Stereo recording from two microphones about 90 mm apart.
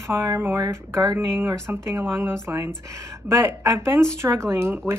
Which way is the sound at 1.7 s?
20° right (ahead or behind).